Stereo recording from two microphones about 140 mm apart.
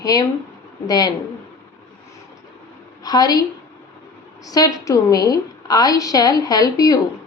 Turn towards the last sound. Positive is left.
turn(degrees=25)  # may be behind; listen again after turning